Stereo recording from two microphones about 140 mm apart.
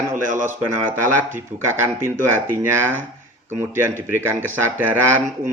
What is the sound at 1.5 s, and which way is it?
Speech, 15° right (ahead or behind).